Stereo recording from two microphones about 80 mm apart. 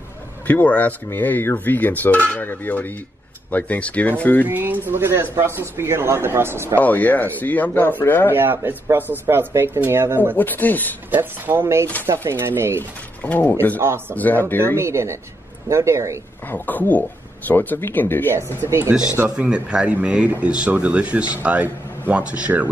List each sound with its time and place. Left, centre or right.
0.5 s speech: centre
4.5 s speech: right
6.8 s speech: left
8.3 s speech: right
10.3 s speech: left
11.1 s speech: right
13.2 s speech: left
13.7 s speech: right
14.1 s speech: left
14.8 s speech: right
16.4 s speech: left
18.6 s speech: right
19.2 s speech: centre